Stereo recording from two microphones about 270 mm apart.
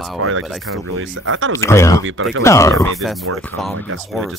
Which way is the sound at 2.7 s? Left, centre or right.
Centre.